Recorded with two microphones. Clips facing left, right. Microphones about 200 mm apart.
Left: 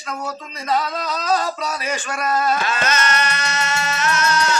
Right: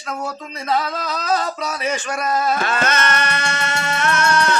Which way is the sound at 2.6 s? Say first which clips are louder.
Right 1 dB; 55° right (ahead or behind).